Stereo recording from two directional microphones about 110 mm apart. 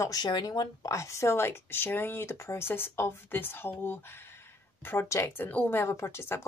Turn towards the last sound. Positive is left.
turn(degrees=25)  # may be behind; listen again after turning